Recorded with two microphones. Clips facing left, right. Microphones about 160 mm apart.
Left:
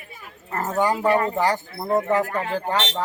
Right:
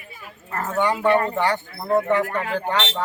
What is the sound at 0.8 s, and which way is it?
Speech, 35° left (ahead or behind).